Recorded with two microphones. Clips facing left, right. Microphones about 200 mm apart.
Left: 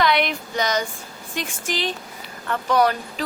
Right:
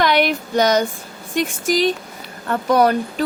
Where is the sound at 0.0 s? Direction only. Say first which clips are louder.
Right 4 dB; 45° right (ahead or behind).